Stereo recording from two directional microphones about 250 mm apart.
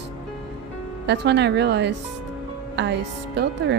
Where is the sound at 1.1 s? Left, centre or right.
Right.